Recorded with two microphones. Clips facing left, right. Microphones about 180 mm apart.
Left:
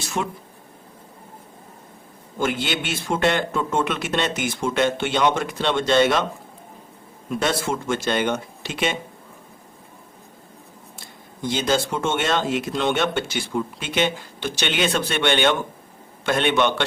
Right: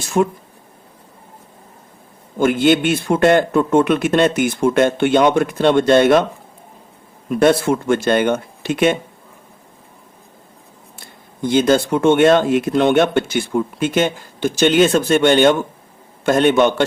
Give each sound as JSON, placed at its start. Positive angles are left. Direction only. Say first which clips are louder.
{"t": 0.0, "sound": "speech", "louder": "right 10 dB", "side_deg": -50}
{"t": 2.4, "sound": "speech", "louder": "right 11 dB", "side_deg": -50}
{"t": 7.3, "sound": "speech", "louder": "right 9 dB", "side_deg": -55}
{"t": 11.4, "sound": "speech", "louder": "right 8 dB", "side_deg": -55}